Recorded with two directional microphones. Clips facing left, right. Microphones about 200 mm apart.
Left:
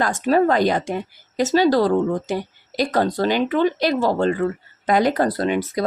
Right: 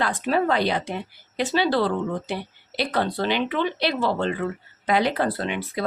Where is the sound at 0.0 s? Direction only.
45° left (ahead or behind).